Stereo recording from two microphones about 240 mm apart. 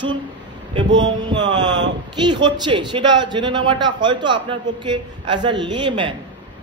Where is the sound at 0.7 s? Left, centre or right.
Centre.